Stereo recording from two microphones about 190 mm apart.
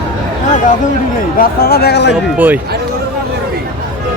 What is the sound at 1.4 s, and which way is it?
Speech, 55° left (ahead or behind).